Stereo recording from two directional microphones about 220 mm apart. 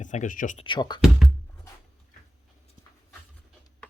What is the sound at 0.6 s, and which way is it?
Speech, 20° left (ahead or behind).